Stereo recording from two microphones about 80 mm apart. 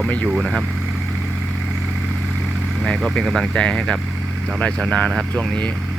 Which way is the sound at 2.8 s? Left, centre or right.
Centre.